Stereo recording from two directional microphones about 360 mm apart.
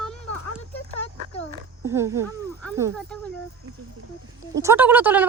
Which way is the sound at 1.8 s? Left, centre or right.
Centre.